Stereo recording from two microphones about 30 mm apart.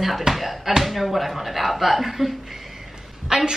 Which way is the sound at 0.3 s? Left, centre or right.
Centre.